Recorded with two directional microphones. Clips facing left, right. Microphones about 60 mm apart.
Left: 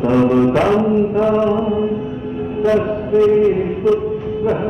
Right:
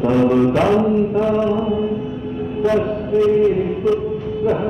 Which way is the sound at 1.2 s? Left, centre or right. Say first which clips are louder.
Left 2 dB; left.